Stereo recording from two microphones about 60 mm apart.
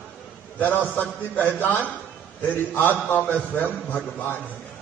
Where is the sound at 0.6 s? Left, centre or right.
Left.